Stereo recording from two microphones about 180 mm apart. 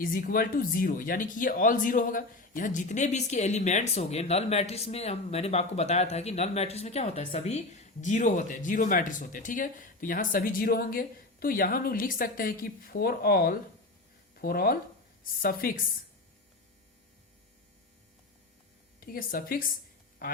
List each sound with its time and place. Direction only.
0.0 s speech: 50° left (ahead or behind)
18.9 s speech: 55° left (ahead or behind)